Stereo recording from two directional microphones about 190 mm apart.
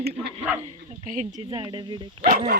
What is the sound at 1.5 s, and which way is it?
Speech, 20° right (ahead or behind).